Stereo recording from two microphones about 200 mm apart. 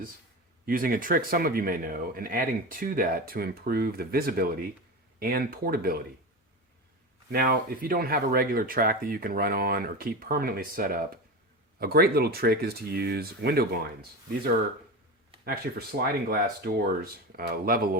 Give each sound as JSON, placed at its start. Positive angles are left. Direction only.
{"t": 0.6, "sound": "speech", "side_deg": -45}
{"t": 7.3, "sound": "speech", "side_deg": -50}
{"t": 15.4, "sound": "speech", "side_deg": -50}